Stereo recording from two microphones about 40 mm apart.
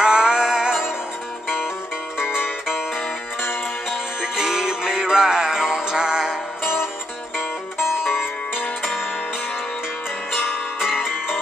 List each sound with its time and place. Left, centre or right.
0.0 s music: centre
4.2 s music: centre
6.6 s music: left
8.0 s music: left
10.3 s music: centre